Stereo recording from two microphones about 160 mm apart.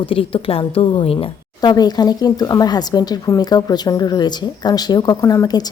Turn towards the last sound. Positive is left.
turn(degrees=25)  # may be behind; listen again after turning